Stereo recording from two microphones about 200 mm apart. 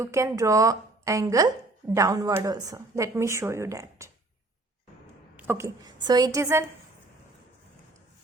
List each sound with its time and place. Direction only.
0.0 s a woman's voice: 15° right (ahead or behind)
5.4 s a woman's voice: 10° right (ahead or behind)